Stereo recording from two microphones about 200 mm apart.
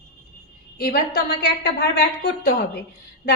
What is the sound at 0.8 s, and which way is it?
A woman's voice, 50° left (ahead or behind).